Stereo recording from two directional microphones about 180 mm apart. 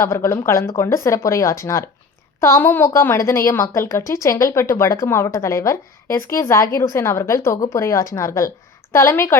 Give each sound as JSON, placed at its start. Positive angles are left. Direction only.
{"t": 0.0, "sound": "a woman's voice", "side_deg": 15}